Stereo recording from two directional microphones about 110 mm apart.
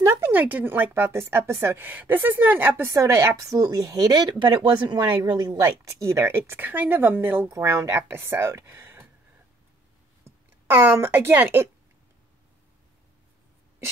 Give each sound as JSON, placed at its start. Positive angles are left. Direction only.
{"t": 0.0, "sound": "a woman's voice", "side_deg": -20}
{"t": 5.9, "sound": "speech", "side_deg": -25}
{"t": 10.7, "sound": "speech", "side_deg": -20}